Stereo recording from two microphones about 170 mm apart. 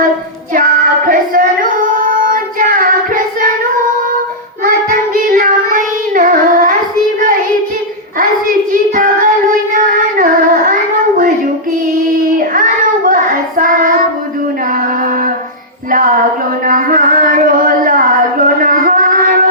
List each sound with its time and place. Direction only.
0.5 s female singing: 55° right (ahead or behind)
4.6 s child singing: 55° right (ahead or behind)
8.7 s child singing: 50° right (ahead or behind)
13.1 s child singing: 50° right (ahead or behind)
15.9 s a sound: 55° right (ahead or behind)